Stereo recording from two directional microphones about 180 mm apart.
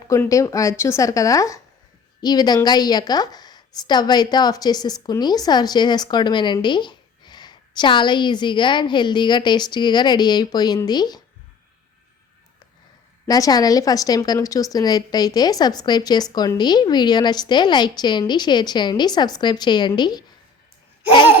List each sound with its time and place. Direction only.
0.1 s a woman's voice: 15° left (ahead or behind)
13.2 s a woman's voice: 20° left (ahead or behind)